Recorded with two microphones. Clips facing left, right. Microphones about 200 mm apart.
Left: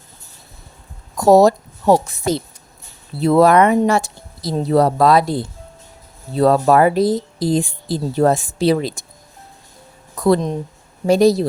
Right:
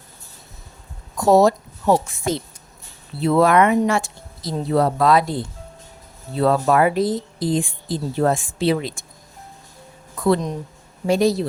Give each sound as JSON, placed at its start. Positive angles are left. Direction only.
{"t": 1.1, "sound": "a woman's voice", "side_deg": 40}
{"t": 10.2, "sound": "speech", "side_deg": 40}